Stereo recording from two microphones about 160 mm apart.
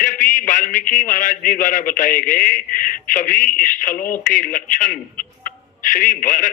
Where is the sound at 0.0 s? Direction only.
55° left (ahead or behind).